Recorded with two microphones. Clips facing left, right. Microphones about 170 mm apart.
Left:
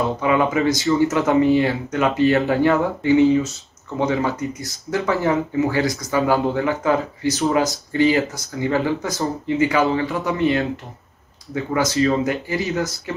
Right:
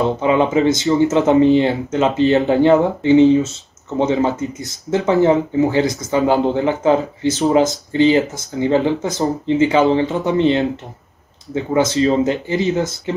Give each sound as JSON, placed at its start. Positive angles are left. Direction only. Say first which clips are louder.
{"t": 0.2, "sound": "speech", "louder": "right 3 dB", "side_deg": -25}